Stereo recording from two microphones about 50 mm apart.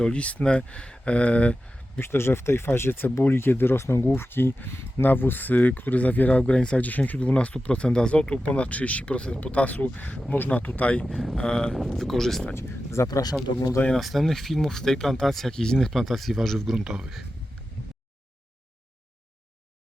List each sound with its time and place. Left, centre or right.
0.0 s speech: left
2.0 s speech: left
5.0 s speech: left; by 8.4 s centre
8.4 s speech: left
11.0 s speech: centre
11.3 s speech: centre
11.7 s speech: centre
12.5 s speech: left
13.9 s speech: centre
15.9 s speech: centre
16.7 s speech: centre